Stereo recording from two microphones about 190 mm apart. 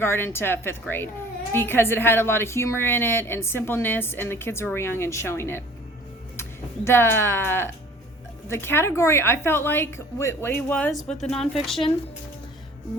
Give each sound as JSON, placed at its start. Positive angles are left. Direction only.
{"t": 0.0, "sound": "a woman's voice", "side_deg": 15}
{"t": 6.8, "sound": "a woman's voice", "side_deg": 10}